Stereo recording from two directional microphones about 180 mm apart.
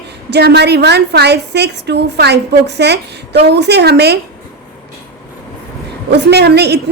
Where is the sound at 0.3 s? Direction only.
65° right (ahead or behind).